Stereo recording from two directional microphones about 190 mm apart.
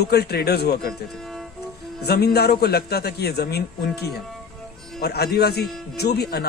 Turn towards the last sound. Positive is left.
turn(degrees=55)  # may be behind; listen again after turning